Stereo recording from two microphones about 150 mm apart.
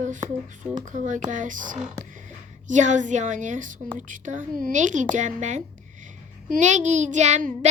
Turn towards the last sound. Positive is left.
turn(degrees=-50)  # may be behind; listen again after turning